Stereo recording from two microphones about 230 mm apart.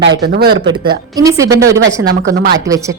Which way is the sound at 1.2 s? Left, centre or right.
Centre.